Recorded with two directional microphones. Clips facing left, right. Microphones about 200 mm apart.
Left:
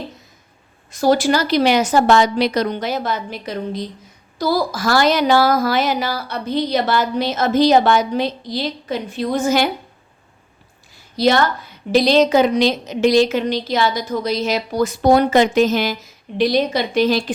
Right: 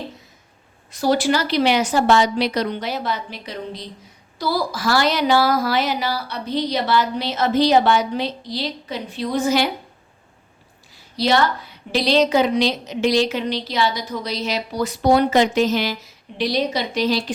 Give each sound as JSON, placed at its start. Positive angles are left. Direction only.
{"t": 0.9, "sound": "a woman's voice", "side_deg": 45}
{"t": 11.2, "sound": "a woman's voice", "side_deg": 50}